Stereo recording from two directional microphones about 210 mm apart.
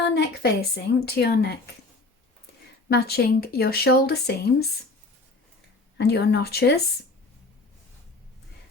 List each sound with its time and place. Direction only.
0.1 s speech: 50° left (ahead or behind)
2.9 s speech: 50° left (ahead or behind)
6.0 s speech: 50° left (ahead or behind)